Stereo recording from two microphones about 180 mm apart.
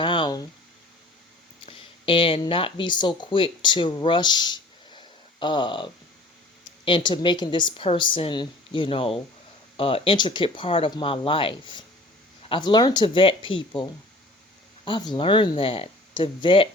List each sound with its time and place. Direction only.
0.0 s a sound: 25° left (ahead or behind)
1.6 s a woman's voice: 30° left (ahead or behind)
14.8 s a woman's voice: 25° left (ahead or behind)